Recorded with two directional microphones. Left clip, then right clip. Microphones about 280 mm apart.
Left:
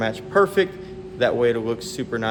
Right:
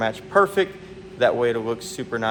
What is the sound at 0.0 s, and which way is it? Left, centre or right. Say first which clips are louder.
Speech: even; centre.